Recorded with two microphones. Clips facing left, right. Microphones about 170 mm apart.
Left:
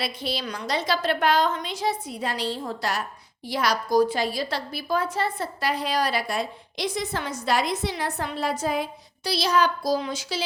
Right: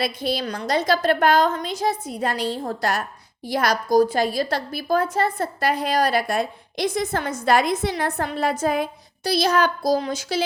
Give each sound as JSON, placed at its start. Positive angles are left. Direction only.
{"t": 0.0, "sound": "a woman's voice", "side_deg": -45}